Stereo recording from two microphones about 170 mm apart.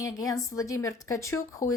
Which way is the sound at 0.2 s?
20° left (ahead or behind).